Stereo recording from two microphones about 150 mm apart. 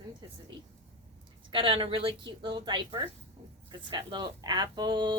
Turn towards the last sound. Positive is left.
turn(degrees=-30)  # may be behind; listen again after turning